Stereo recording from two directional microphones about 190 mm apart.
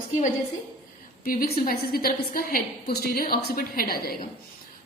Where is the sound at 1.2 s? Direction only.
50° left (ahead or behind).